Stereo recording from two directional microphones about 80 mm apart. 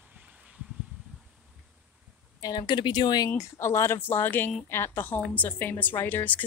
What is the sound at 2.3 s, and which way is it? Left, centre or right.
Speech, left.